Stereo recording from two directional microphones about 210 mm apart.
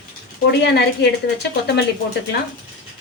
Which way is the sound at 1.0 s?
55° left (ahead or behind).